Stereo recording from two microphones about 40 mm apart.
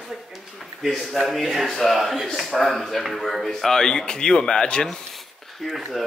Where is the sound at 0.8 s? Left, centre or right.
Centre; by 4.8 s left.